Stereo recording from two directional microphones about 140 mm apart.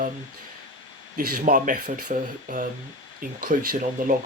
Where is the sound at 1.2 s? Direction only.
85° right.